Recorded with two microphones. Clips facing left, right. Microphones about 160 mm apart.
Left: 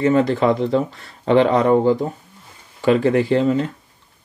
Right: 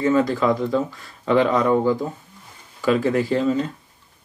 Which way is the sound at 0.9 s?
65° left (ahead or behind).